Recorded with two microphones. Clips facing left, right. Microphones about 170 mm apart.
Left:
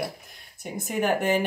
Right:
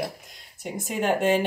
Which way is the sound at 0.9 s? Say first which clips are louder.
Right 1 dB; 20° right (ahead or behind).